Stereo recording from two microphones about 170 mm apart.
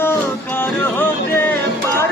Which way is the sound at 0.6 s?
10° left (ahead or behind).